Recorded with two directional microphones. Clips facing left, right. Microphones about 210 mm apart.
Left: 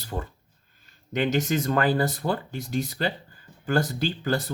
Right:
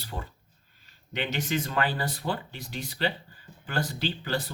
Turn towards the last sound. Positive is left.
turn(degrees=45)  # may be behind; listen again after turning